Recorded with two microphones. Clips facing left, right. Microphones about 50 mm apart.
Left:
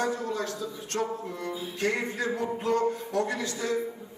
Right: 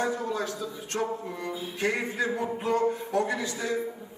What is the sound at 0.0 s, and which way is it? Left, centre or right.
Speech, centre.